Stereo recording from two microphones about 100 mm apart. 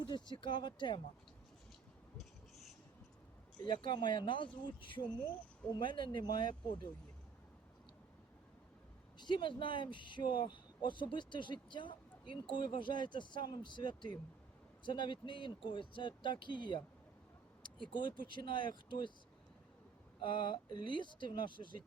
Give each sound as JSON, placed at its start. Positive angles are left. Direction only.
{"t": 0.0, "sound": "speech", "side_deg": 50}
{"t": 2.1, "sound": "a sound", "side_deg": 0}
{"t": 3.6, "sound": "speech", "side_deg": 50}
{"t": 9.1, "sound": "speech", "side_deg": 50}
{"t": 20.2, "sound": "speech", "side_deg": 55}